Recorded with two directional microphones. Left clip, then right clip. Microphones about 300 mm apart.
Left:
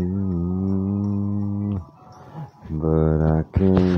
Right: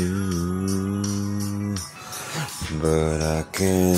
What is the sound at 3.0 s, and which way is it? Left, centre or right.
Speech, centre.